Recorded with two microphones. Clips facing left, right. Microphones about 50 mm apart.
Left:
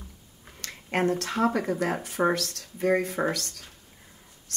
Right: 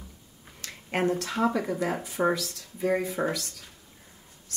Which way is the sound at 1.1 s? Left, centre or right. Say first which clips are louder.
Left 1 dB; left.